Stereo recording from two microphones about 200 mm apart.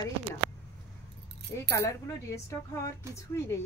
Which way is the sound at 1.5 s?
15° left (ahead or behind).